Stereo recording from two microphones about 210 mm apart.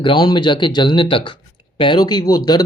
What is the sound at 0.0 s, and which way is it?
Speech, 20° left (ahead or behind).